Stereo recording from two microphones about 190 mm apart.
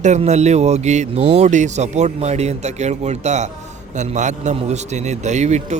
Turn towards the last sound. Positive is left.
turn(degrees=-35)  # may be behind; listen again after turning